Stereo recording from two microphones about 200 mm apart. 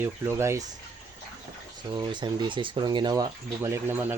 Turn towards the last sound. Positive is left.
turn(degrees=-10)  # may be behind; listen again after turning